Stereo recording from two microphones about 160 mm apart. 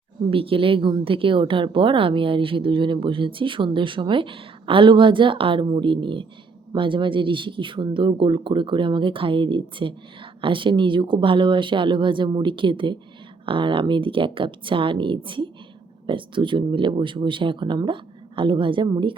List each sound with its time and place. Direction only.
0.3 s a woman's voice: 35° right (ahead or behind)